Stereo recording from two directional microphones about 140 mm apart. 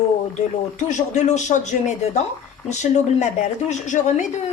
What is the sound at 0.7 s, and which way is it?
A woman's voice, 60° left (ahead or behind).